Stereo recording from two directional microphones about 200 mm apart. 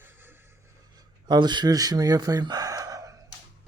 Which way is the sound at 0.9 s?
20° right (ahead or behind).